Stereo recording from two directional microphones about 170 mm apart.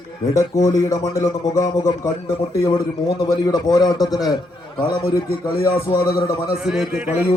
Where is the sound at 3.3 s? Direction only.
25° left (ahead or behind).